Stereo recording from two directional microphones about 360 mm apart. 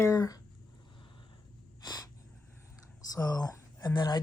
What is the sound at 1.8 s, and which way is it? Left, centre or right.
Gasp, centre.